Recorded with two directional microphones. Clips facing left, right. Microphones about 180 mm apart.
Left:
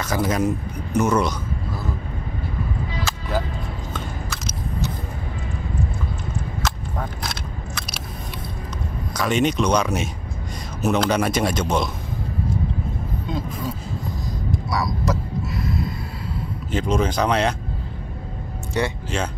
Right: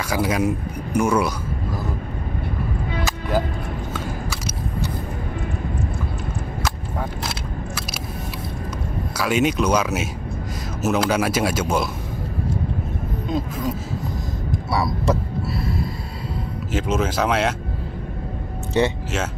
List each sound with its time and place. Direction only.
0.0 s speech: 10° right (ahead or behind)
3.1 s music: 15° right (ahead or behind)
6.6 s single-lens reflex camera: 5° right (ahead or behind)
9.1 s speech: 5° right (ahead or behind)
14.7 s a sound: 30° right (ahead or behind)
16.7 s speech: 5° right (ahead or behind)